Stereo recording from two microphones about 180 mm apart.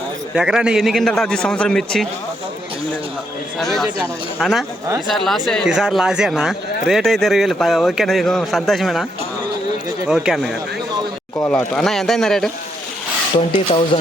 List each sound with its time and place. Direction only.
0.3 s speech: 5° right (ahead or behind)
3.6 s speech: centre (ahead or behind)
10.1 s speech: centre (ahead or behind)
13.9 s speech: 25° left (ahead or behind)